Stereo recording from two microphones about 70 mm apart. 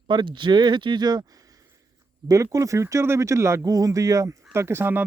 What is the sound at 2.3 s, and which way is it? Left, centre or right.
Speech, right.